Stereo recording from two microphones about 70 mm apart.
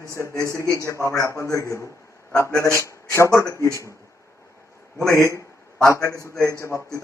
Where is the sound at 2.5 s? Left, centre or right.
Right.